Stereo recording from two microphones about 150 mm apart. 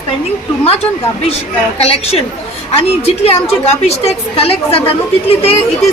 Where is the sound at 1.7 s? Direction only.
45° left (ahead or behind).